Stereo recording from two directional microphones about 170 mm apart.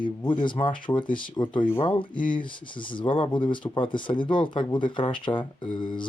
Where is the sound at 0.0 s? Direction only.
30° left (ahead or behind).